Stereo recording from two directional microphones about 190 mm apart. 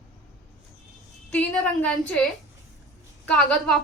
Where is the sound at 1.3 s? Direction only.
5° left (ahead or behind).